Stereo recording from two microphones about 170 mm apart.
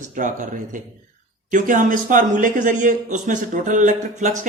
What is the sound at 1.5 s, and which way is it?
A man's voice, 50° right (ahead or behind).